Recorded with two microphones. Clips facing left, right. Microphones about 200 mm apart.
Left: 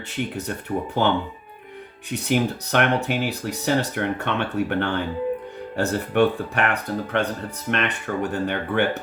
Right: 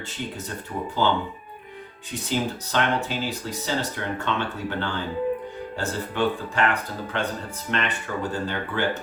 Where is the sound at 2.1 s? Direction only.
65° left (ahead or behind).